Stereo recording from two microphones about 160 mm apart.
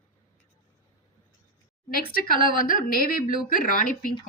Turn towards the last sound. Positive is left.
turn(degrees=60)  # may be behind; listen again after turning